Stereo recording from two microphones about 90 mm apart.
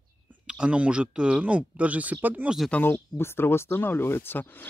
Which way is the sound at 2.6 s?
20° left (ahead or behind).